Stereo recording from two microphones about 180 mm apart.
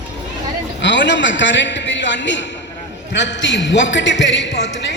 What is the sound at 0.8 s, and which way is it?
A man's voice, 80° left.